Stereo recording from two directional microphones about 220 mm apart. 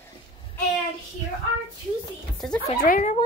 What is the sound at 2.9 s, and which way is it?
Speech, 35° left (ahead or behind).